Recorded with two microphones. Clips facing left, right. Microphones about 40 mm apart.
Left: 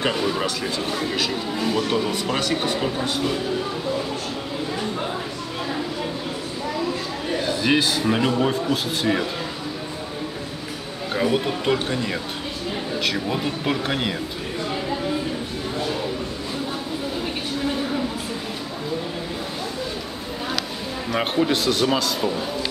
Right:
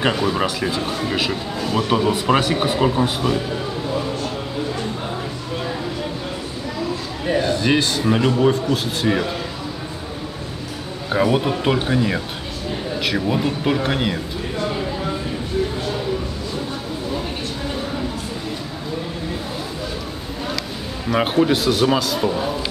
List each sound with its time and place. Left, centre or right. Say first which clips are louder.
0.1 s a man's voice: right 3 dB; centre
7.3 s a man's voice: right 2 dB; centre
11.1 s a man's voice: right 4 dB; centre
21.1 s a man's voice: right 4 dB; centre